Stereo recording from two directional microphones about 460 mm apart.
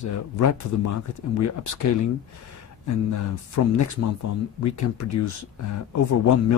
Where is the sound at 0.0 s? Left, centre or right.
Left.